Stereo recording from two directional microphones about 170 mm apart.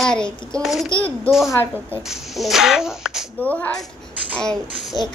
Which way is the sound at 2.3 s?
Centre (ahead or behind).